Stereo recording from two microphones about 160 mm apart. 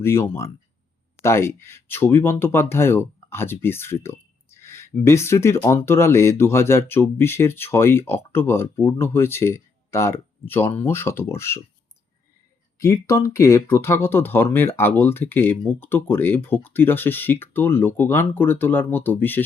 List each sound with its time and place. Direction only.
0.0 s speech: 15° left (ahead or behind)
12.8 s speech: 20° left (ahead or behind)